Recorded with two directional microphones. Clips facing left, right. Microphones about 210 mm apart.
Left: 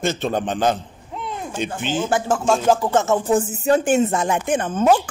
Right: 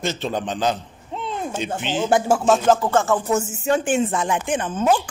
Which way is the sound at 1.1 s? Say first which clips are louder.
Right 1 dB; 25° right (ahead or behind).